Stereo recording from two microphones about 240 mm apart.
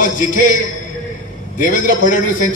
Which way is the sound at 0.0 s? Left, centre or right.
Left.